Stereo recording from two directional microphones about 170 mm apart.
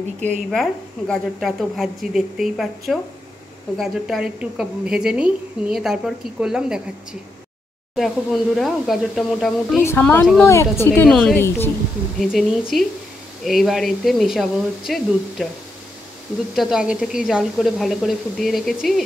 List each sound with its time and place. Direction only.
0.5 s a woman's voice: centre (ahead or behind)
7.9 s a woman's voice: centre (ahead or behind)
9.8 s a woman's voice: 10° left (ahead or behind)
12.2 s a woman's voice: centre (ahead or behind)
16.5 s a woman's voice: 5° right (ahead or behind)